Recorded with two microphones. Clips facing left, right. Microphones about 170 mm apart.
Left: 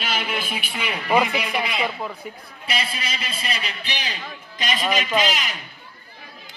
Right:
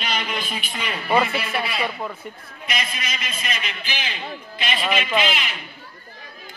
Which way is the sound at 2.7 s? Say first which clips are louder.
Left 1 dB; 30° left (ahead or behind).